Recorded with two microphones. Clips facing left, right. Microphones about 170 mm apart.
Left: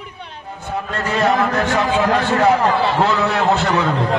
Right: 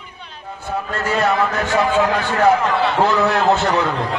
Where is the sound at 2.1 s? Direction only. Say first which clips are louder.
Left 1 dB; 35° left (ahead or behind).